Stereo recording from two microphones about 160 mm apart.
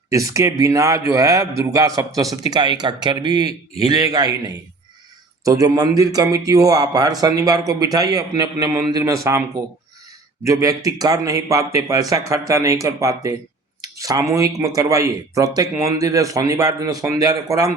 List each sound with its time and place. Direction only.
0.1 s a man's voice: 20° right (ahead or behind)
10.4 s a man's voice: 20° right (ahead or behind)